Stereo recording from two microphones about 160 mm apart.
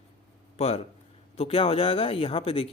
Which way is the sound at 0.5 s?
40° left (ahead or behind).